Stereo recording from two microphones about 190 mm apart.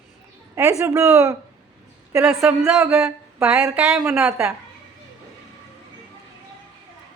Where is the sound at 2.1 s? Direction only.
5° right (ahead or behind).